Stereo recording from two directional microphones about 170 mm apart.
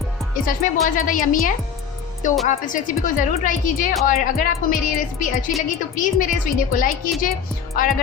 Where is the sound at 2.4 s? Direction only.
45° left (ahead or behind).